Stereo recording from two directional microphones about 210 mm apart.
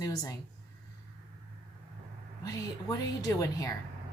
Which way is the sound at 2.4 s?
15° left (ahead or behind).